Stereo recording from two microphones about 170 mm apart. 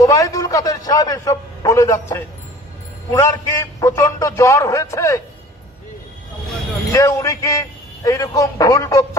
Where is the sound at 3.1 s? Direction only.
20° left (ahead or behind).